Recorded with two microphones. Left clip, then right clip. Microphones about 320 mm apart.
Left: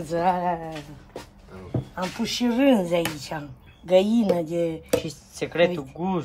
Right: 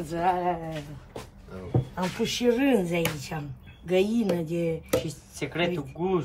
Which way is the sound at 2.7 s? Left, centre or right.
Centre.